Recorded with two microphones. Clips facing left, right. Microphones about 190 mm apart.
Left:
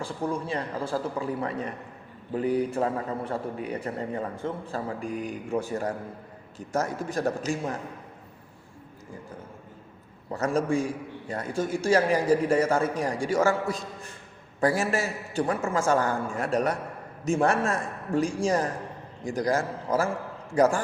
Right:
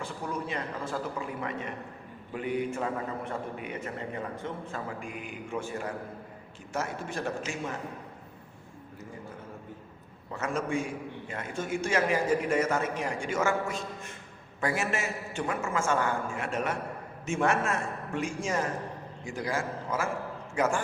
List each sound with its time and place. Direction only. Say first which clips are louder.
0.0 s a man's voice: left 5 dB; 30° left (ahead or behind)
10.3 s a man's voice: left 5 dB; 35° left (ahead or behind)